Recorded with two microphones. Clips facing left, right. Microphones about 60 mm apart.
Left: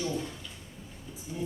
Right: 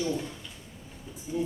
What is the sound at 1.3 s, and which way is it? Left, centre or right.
Speech, right.